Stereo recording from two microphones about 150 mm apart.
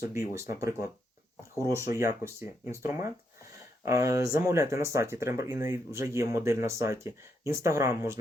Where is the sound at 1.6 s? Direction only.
20° right (ahead or behind).